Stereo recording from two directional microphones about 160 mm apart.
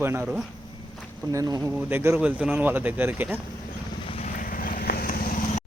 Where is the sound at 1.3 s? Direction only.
20° right (ahead or behind).